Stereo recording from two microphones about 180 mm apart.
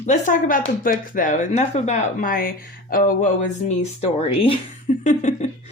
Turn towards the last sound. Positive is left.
turn(degrees=40)  # may be behind; listen again after turning